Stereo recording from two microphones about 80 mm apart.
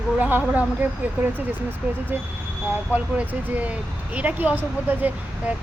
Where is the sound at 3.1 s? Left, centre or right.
Centre.